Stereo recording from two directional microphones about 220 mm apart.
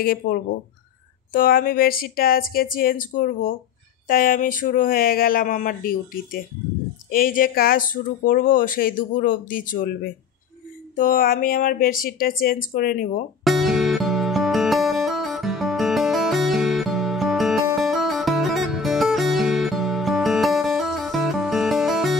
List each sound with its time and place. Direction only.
0.2 s speech: 45° left (ahead or behind)
11.0 s speech: 40° left (ahead or behind)
13.4 s music: centre (ahead or behind)